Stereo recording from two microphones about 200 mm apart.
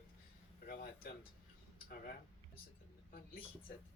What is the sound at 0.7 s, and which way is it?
Speech, 45° left (ahead or behind).